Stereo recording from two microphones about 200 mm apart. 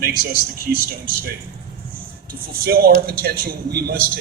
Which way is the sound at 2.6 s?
50° right (ahead or behind).